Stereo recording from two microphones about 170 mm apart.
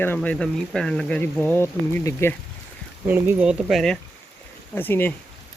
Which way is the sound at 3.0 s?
10° right (ahead or behind).